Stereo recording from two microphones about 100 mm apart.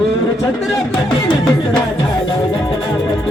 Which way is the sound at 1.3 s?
45° left (ahead or behind).